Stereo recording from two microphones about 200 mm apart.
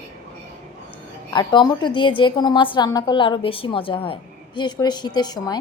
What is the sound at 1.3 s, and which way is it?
A woman's voice, 20° left (ahead or behind).